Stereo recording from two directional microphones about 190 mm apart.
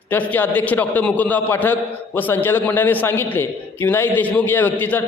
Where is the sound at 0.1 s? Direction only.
10° left (ahead or behind).